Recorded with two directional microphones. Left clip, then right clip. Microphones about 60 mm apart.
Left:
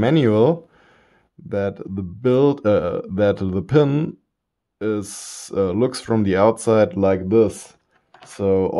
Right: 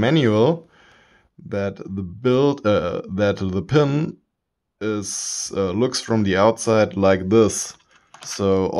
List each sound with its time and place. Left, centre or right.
0.0 s speech: left
7.2 s speech: right
8.4 s speech: centre